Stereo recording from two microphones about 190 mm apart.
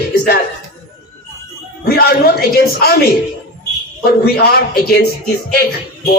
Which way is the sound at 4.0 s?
55° left (ahead or behind).